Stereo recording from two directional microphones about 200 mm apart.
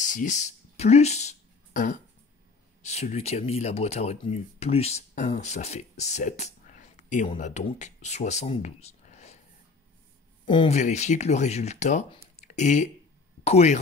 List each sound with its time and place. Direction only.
0.0 s a sound: 40° left (ahead or behind)
2.8 s speech: 35° left (ahead or behind)
10.4 s speech: 25° left (ahead or behind)